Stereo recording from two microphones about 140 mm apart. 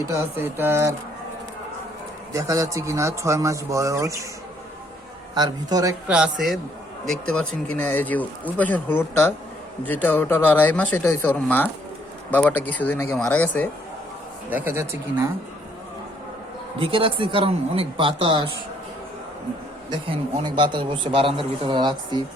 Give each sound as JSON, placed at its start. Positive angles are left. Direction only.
{"t": 0.1, "sound": "speech", "side_deg": -20}
{"t": 2.3, "sound": "speech", "side_deg": -25}
{"t": 5.3, "sound": "speech", "side_deg": -30}
{"t": 6.1, "sound": "a man's voice", "side_deg": -5}
{"t": 14.5, "sound": "speech", "side_deg": -15}
{"t": 16.8, "sound": "a man's voice", "side_deg": -40}
{"t": 20.1, "sound": "a man's voice", "side_deg": -35}